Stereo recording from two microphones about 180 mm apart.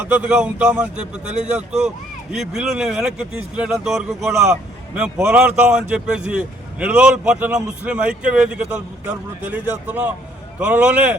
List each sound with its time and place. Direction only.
0.0 s speech: 10° right (ahead or behind)